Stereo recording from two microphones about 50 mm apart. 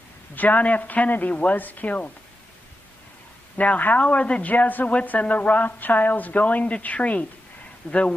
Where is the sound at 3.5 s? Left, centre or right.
Left.